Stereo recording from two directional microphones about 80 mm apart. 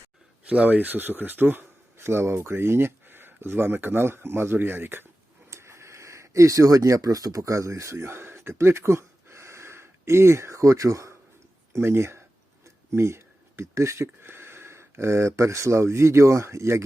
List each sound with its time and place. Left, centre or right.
0.4 s speech: centre
5.5 s a sound: right
11.7 s speech: right